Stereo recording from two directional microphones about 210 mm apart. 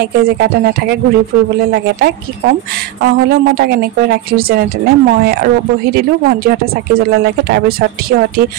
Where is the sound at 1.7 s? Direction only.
50° right (ahead or behind).